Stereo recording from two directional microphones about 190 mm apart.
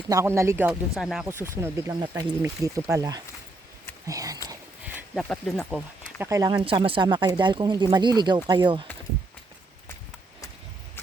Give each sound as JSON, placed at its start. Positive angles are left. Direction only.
{"t": 0.1, "sound": "speech", "side_deg": -15}
{"t": 5.1, "sound": "speech", "side_deg": 5}
{"t": 6.1, "sound": "speech", "side_deg": -15}
{"t": 6.6, "sound": "speech", "side_deg": -30}